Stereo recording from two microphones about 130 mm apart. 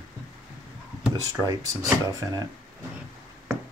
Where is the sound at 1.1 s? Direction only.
25° right (ahead or behind).